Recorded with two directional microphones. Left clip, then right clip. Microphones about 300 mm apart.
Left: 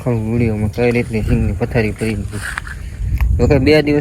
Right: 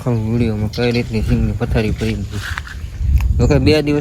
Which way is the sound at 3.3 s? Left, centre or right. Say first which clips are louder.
Left 2 dB; centre.